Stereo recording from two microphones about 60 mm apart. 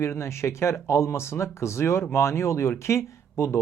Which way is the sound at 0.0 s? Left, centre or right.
Left.